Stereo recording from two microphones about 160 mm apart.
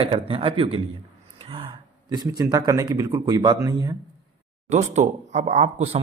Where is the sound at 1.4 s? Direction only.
35° right (ahead or behind).